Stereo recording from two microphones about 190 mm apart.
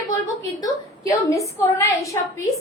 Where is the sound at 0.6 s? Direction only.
15° left (ahead or behind).